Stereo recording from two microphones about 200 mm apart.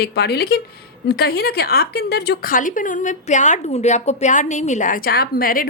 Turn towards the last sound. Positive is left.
turn(degrees=45)  # may be behind; listen again after turning